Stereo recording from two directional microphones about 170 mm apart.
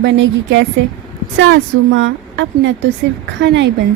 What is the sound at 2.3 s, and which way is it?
A woman's voice, 90° right.